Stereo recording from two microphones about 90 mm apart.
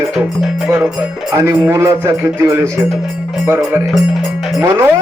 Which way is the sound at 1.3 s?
30° right (ahead or behind).